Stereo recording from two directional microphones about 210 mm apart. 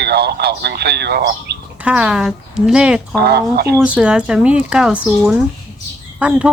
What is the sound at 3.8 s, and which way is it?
Speech, 5° right (ahead or behind).